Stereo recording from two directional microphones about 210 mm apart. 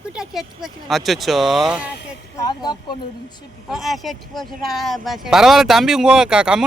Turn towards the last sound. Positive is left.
turn(degrees=-5)  # may be behind; listen again after turning